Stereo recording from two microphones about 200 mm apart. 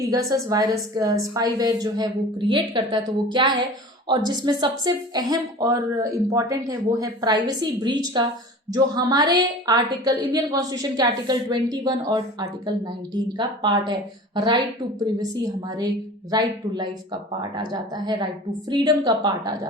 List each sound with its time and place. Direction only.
0.0 s a woman's voice: 15° right (ahead or behind)